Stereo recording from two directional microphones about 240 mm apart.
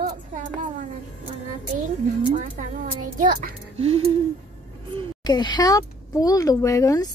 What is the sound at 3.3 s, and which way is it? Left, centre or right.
Speech, right.